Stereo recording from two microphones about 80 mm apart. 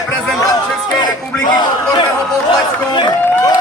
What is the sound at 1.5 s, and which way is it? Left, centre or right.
Speech, left.